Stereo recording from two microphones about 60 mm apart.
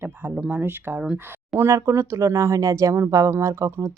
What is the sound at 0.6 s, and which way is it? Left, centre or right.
Speech, right.